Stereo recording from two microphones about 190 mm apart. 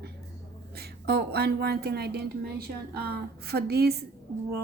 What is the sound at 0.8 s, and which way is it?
Speech, 55° right (ahead or behind).